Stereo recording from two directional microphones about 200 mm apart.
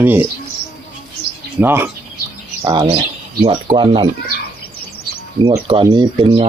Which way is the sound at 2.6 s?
25° right (ahead or behind).